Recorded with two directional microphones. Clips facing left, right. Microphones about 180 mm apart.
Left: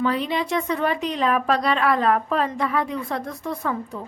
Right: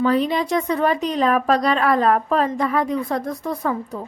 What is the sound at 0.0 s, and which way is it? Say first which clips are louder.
A woman's voice: right 4 dB; 40° right (ahead or behind).